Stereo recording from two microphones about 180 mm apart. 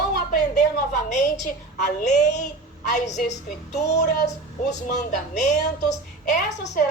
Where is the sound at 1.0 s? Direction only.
40° left (ahead or behind).